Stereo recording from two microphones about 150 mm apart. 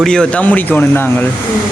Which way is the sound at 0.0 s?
5° left (ahead or behind).